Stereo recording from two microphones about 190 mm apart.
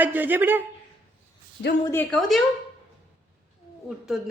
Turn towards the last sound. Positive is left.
turn(degrees=0)  # may be behind; listen again after turning